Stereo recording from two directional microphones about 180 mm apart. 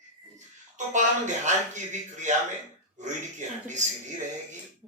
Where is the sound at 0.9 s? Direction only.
45° right (ahead or behind).